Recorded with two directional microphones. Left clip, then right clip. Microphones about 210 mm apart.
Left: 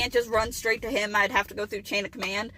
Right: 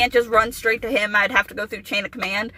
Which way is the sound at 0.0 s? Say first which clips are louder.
Right 8 dB; 15° right (ahead or behind).